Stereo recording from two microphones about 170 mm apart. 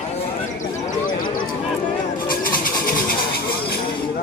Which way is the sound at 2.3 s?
55° left (ahead or behind).